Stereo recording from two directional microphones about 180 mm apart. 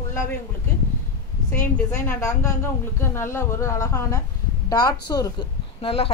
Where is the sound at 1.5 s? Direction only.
10° left (ahead or behind).